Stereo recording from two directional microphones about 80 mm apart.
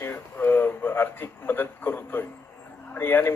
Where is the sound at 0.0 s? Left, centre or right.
Left.